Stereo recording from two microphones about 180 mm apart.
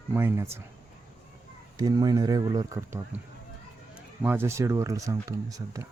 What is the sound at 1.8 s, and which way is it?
Speech, 20° right (ahead or behind).